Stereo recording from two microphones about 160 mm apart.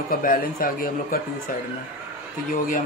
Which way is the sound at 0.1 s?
60° left (ahead or behind).